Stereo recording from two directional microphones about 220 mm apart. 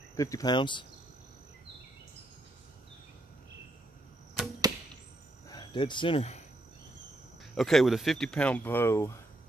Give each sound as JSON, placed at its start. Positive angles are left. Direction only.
{"t": 0.1, "sound": "speech", "side_deg": 15}
{"t": 4.4, "sound": "arrow", "side_deg": -5}
{"t": 5.5, "sound": "speech", "side_deg": 20}
{"t": 7.5, "sound": "speech", "side_deg": 0}